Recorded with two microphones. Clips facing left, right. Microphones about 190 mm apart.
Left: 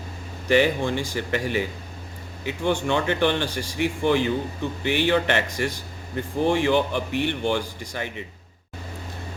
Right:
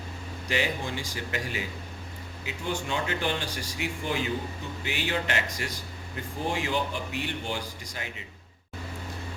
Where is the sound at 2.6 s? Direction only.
65° left (ahead or behind).